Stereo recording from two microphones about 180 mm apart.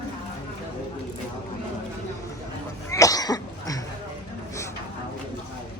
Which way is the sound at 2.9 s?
20° left (ahead or behind).